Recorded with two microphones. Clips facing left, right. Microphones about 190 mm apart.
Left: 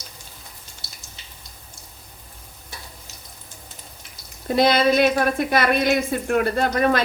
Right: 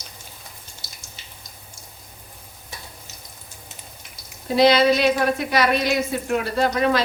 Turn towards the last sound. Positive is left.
turn(degrees=50)  # may be behind; listen again after turning